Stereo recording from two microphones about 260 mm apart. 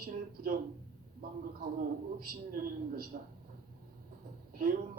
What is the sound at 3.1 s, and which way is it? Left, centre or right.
Speech, right.